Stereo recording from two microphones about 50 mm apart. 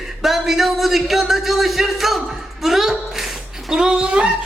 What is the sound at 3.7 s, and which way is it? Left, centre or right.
Speech, centre.